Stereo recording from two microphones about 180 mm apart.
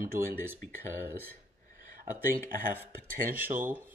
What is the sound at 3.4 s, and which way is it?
Speech, 10° right (ahead or behind).